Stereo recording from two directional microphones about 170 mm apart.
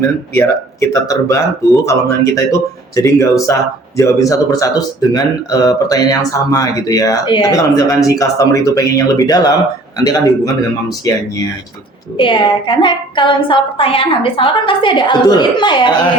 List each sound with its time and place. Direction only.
0.3 s speech: 15° left (ahead or behind)
12.1 s speech: 30° left (ahead or behind)